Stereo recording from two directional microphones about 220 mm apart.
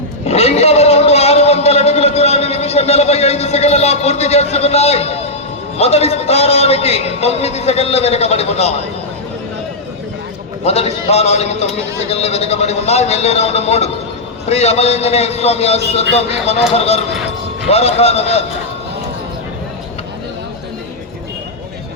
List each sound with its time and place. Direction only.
0.3 s a sound: 30° left (ahead or behind)
5.7 s a man's voice: 30° left (ahead or behind)
10.7 s a man's voice: 30° left (ahead or behind)